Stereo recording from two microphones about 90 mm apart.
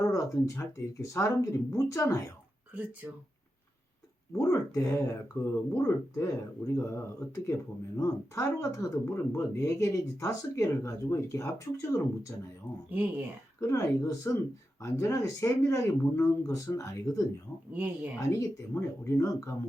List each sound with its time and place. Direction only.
0.0 s speech: 40° left (ahead or behind)
2.7 s speech: 15° right (ahead or behind)
4.3 s speech: 35° left (ahead or behind)
12.7 s speech: 20° left (ahead or behind)
13.6 s speech: 35° left (ahead or behind)
17.7 s speech: 15° right (ahead or behind)
18.2 s speech: 35° left (ahead or behind)